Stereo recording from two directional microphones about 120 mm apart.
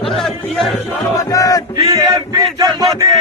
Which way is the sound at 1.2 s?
30° left (ahead or behind).